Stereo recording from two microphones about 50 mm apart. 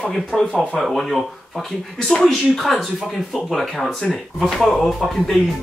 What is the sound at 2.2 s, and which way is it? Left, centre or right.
Speech, centre.